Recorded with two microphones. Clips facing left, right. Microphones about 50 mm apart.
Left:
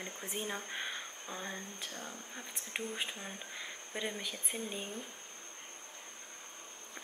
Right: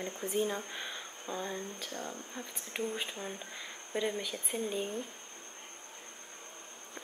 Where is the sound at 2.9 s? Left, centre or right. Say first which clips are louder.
Right 2 dB; centre.